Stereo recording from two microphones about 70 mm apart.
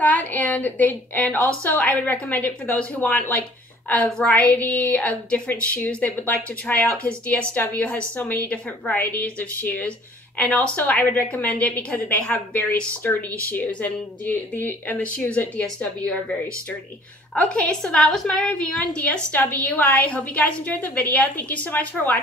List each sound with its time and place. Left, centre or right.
0.0 s a woman's voice: left